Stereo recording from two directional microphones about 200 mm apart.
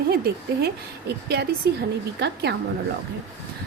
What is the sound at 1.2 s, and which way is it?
A woman's voice, 55° right (ahead or behind).